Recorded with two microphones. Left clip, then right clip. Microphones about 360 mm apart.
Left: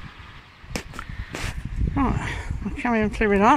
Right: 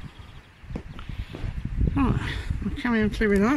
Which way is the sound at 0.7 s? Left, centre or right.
Left.